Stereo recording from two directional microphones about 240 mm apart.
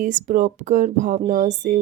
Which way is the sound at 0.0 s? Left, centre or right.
Right.